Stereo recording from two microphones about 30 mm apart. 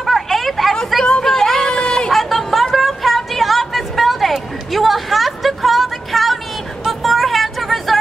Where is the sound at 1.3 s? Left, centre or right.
Centre.